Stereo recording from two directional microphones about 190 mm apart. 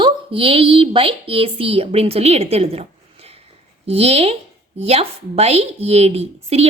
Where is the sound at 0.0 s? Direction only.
30° right (ahead or behind).